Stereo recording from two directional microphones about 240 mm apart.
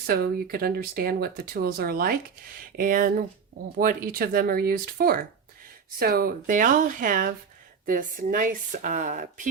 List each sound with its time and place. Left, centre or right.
0.0 s speech: right